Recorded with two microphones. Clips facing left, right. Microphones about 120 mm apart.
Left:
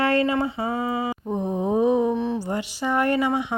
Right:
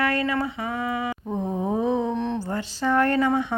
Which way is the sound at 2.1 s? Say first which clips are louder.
Left 2 dB; 5° left (ahead or behind).